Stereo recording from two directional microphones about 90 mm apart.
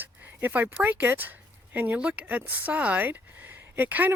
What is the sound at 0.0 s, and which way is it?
Speech, 20° right (ahead or behind).